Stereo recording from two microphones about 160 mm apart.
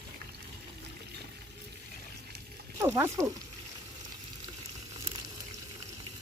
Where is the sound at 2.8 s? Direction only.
15° right (ahead or behind).